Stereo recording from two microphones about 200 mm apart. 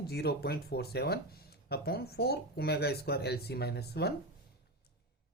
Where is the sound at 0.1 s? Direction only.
55° left (ahead or behind).